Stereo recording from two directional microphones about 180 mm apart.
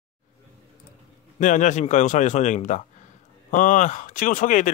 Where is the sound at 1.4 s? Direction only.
45° left (ahead or behind).